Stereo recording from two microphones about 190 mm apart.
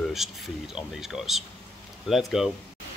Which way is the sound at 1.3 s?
Centre (ahead or behind).